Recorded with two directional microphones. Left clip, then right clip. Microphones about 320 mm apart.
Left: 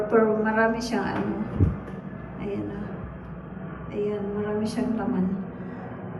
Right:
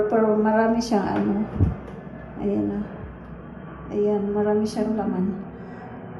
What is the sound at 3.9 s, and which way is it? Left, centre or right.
A woman's voice, centre.